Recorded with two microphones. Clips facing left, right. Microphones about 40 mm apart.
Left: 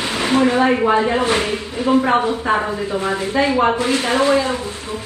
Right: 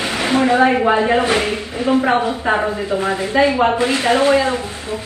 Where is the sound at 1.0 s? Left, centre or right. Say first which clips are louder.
Right 1 dB; right.